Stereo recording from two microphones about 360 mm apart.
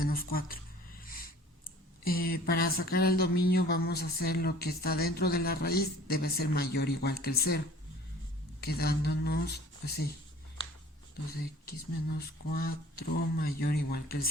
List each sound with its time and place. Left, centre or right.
0.0 s speech: left
1.6 s speech: left
8.6 s speech: left
12.5 s speech: left